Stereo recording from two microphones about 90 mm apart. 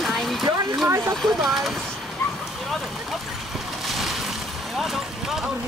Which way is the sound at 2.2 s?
30° left (ahead or behind).